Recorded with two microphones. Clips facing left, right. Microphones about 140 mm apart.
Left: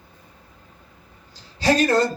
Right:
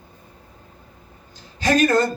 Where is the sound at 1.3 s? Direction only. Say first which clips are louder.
Even; 35° left (ahead or behind).